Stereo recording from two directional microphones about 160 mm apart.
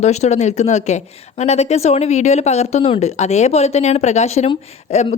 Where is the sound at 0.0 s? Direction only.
45° left (ahead or behind).